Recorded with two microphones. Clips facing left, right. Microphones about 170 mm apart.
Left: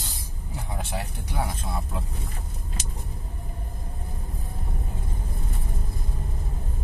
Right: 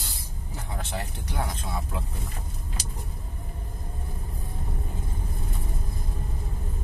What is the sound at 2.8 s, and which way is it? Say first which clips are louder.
Vehicle: right 1 dB; 35° right (ahead or behind).